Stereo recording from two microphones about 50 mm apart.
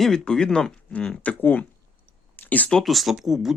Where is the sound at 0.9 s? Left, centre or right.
Left.